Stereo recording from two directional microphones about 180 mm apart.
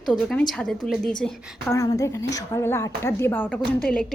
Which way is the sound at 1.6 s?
20° left (ahead or behind).